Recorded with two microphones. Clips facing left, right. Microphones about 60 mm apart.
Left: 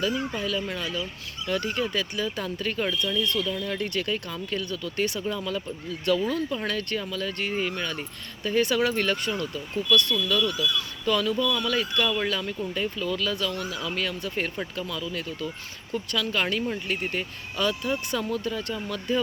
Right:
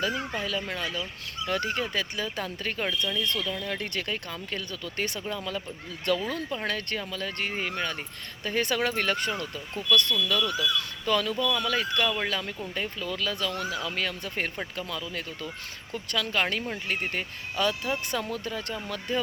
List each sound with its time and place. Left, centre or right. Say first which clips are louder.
0.0 s speech: left 2 dB; right